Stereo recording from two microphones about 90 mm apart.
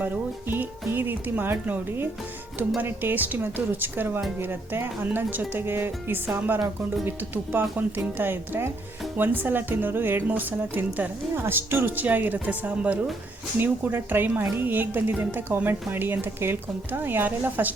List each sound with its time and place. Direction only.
0.0 s speech: 20° right (ahead or behind)